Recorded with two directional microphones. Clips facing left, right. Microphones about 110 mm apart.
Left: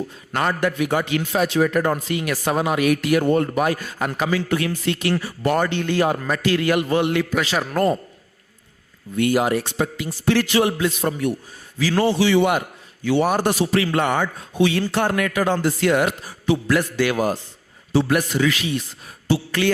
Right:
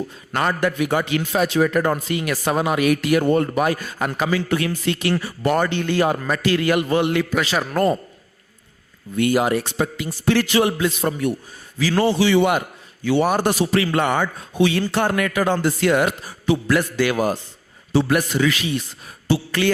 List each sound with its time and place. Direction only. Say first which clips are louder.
0.3 s a man's voice: right 1 dB; 25° right (ahead or behind)
9.1 s a man's voice: right 1 dB; 20° right (ahead or behind)
19.5 s music: right 1 dB; 25° right (ahead or behind)